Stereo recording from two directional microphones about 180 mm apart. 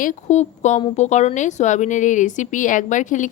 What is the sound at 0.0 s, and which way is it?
Speech, 45° left (ahead or behind).